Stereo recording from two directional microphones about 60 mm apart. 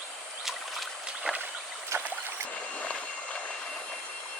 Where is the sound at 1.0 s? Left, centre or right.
Centre.